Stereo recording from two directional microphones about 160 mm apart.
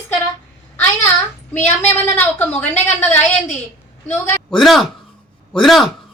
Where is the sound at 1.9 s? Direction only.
10° left (ahead or behind).